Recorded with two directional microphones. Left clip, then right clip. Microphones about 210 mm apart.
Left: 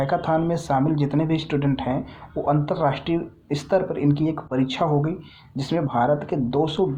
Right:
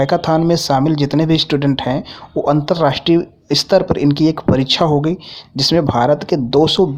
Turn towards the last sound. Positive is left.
turn(degrees=-45)  # may be behind; listen again after turning